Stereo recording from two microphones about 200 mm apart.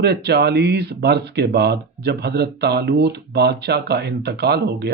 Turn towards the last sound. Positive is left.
turn(degrees=-55)  # may be behind; listen again after turning